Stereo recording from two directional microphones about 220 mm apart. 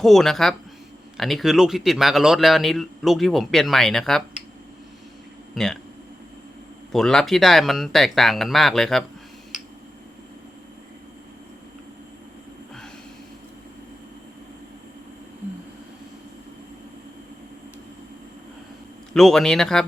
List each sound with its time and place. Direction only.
0.0 s speech: centre (ahead or behind)
5.5 s speech: centre (ahead or behind)
6.9 s speech: 5° left (ahead or behind)
19.1 s speech: centre (ahead or behind)